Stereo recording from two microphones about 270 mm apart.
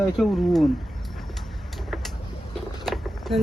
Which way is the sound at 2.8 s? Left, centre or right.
Centre.